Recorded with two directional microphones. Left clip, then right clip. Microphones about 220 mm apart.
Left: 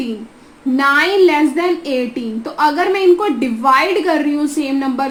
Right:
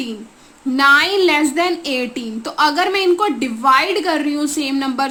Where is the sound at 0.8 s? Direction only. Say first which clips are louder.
Even; 20° right (ahead or behind).